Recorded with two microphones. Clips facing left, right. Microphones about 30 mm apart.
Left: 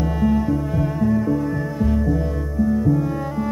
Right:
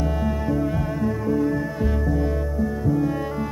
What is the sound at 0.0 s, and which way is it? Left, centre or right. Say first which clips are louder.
Music: left 5 dB; centre.